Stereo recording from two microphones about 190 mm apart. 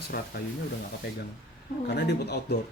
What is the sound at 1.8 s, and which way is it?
Speech, 60° left (ahead or behind).